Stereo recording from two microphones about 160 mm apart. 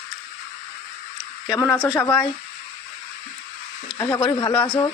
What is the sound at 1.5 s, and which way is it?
Speech, 20° left (ahead or behind).